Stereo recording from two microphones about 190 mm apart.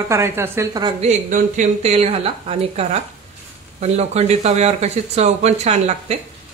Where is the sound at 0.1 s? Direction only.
15° right (ahead or behind).